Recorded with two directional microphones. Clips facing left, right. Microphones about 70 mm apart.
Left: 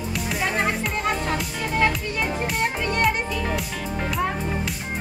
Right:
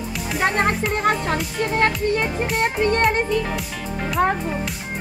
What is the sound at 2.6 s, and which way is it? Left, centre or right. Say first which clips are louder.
Music: right 8 dB; right.